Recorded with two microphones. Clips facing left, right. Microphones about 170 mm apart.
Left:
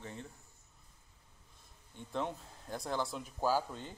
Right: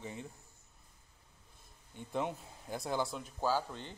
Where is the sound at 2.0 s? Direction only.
10° right (ahead or behind).